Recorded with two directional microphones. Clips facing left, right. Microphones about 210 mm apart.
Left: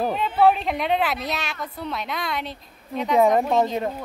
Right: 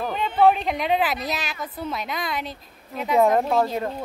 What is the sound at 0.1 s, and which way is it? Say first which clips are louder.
A woman's voice: right 3 dB; centre (ahead or behind).